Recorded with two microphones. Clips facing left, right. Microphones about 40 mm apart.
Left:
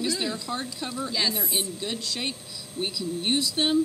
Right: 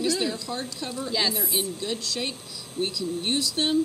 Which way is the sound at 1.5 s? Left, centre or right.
Centre.